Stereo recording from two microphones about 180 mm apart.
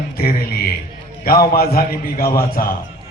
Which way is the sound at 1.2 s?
55° left (ahead or behind).